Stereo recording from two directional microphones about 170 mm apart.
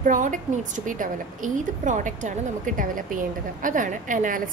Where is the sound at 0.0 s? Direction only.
50° right (ahead or behind).